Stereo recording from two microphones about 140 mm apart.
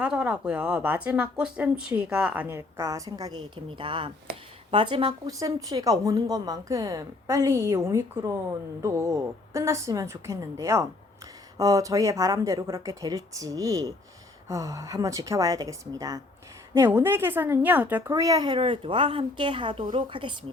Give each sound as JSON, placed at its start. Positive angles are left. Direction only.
{"t": 0.0, "sound": "a woman's voice", "side_deg": -5}
{"t": 18.1, "sound": "a woman's voice", "side_deg": -25}